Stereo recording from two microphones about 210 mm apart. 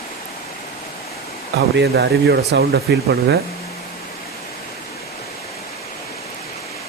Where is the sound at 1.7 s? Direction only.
50° right (ahead or behind).